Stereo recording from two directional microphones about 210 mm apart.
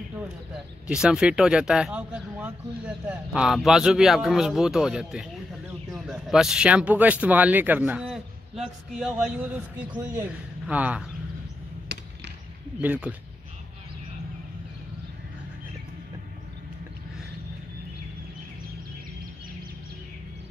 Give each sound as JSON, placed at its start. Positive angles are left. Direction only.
{"t": 0.8, "sound": "speech", "side_deg": -5}
{"t": 11.9, "sound": "a sound", "side_deg": -55}
{"t": 12.8, "sound": "speech", "side_deg": -10}